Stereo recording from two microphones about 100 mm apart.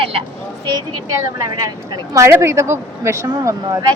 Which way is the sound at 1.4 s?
35° right (ahead or behind).